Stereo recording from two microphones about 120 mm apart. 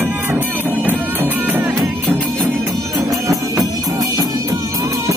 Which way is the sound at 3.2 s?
25° right (ahead or behind).